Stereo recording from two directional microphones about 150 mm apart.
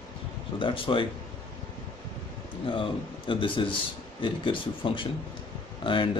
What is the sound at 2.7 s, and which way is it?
Speech, 35° left (ahead or behind).